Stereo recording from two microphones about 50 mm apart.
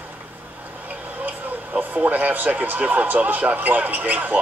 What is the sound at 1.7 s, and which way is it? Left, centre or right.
Speech, right.